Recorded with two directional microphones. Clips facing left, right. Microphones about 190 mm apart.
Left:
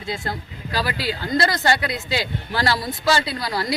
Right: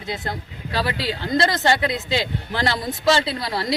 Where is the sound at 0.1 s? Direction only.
20° right (ahead or behind).